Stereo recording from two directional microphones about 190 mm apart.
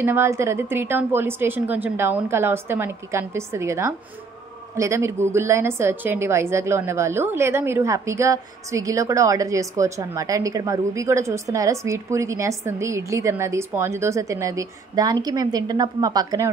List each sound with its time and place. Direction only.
0.0 s a woman's voice: 15° right (ahead or behind)